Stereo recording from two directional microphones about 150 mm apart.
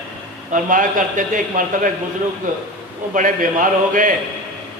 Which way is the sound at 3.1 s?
60° right (ahead or behind).